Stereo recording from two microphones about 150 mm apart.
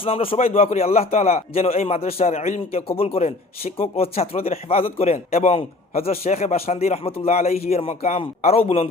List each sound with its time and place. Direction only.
0.0 s a man's voice: 35° left (ahead or behind)